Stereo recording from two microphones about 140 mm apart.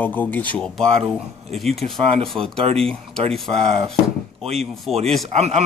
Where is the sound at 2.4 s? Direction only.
45° right (ahead or behind).